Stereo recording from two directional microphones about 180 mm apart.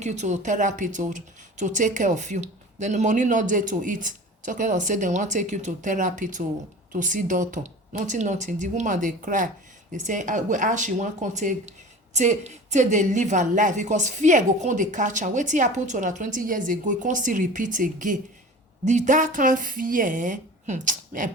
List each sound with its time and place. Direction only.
0.0 s speech: 40° right (ahead or behind)